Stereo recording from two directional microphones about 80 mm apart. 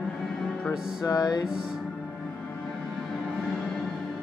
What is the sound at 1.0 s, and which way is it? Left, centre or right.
Music, left.